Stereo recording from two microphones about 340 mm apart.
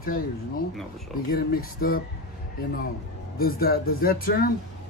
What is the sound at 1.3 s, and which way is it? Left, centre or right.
Speech, left.